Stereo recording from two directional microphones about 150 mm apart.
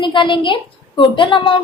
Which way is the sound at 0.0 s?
30° left (ahead or behind).